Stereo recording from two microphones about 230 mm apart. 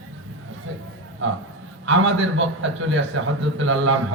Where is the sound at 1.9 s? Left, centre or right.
Right.